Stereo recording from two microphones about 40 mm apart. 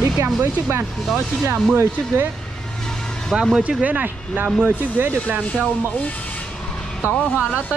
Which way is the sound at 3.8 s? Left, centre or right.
Right.